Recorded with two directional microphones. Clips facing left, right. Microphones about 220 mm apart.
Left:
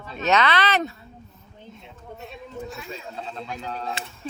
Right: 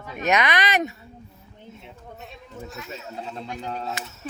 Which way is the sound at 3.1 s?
15° right (ahead or behind).